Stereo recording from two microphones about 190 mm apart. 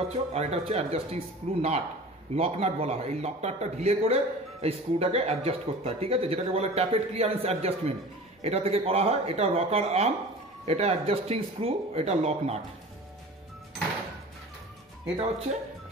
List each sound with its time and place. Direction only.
0.3 s a man's voice: 35° right (ahead or behind)
15.1 s a man's voice: 30° right (ahead or behind)